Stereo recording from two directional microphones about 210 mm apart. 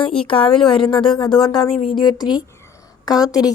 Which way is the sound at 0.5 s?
Centre (ahead or behind).